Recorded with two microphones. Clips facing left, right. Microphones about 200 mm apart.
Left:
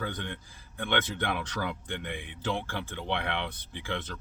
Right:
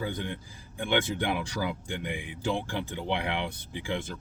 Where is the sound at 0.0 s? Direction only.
10° right (ahead or behind).